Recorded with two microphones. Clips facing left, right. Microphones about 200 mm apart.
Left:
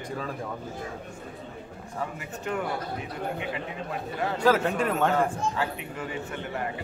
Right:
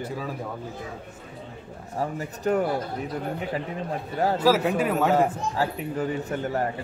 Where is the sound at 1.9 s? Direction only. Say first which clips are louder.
Right 5 dB; 40° right (ahead or behind).